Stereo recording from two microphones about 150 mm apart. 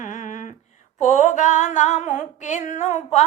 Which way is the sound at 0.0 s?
55° left (ahead or behind).